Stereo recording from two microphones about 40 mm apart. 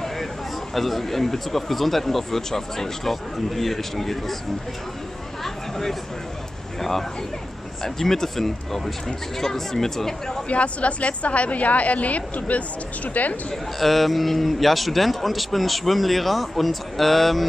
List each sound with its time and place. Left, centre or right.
0.7 s a man's voice: centre
5.4 s a sound: centre
6.8 s speech: centre
10.5 s a woman's voice: left
13.7 s a man's voice: centre